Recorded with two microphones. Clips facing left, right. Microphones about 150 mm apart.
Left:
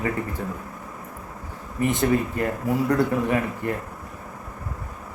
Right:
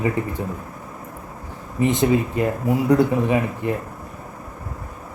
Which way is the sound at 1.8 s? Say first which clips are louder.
Right 3 dB; 20° right (ahead or behind).